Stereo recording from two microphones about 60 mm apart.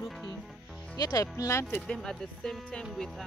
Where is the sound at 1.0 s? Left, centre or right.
Left.